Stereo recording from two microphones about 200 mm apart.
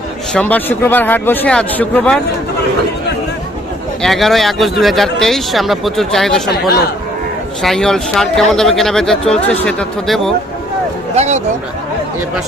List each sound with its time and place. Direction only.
0.3 s speech: 10° left (ahead or behind)
4.0 s speech: centre (ahead or behind)
7.6 s speech: centre (ahead or behind)
11.1 s speech: 35° right (ahead or behind)